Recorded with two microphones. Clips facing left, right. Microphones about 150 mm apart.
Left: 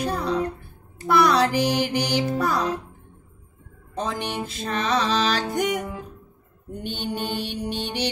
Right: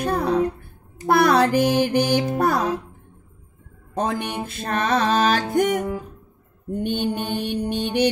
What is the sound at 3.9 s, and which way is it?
Music, 55° right (ahead or behind).